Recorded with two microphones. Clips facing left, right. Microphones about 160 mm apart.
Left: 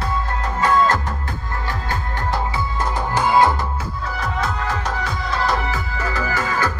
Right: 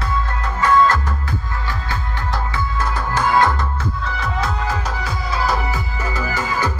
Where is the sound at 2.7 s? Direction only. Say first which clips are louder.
Even; 15° left (ahead or behind).